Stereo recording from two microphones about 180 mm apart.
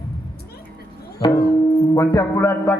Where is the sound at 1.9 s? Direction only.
20° left (ahead or behind).